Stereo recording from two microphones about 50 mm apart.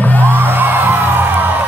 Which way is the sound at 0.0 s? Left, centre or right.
Left.